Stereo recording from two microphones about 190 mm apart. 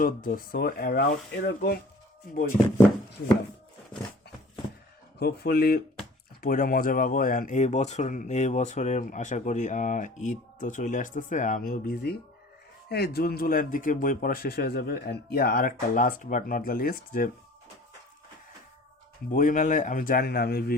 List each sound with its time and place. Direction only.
0.0 s speech: 45° left (ahead or behind)
5.2 s speech: 55° left (ahead or behind)
19.3 s speech: 45° left (ahead or behind)